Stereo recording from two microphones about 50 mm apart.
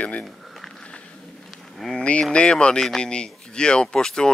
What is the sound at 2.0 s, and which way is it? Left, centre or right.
Speech, left.